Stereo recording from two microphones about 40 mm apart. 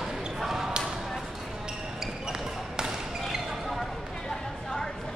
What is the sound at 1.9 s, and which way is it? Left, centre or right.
Basketball bounce, centre.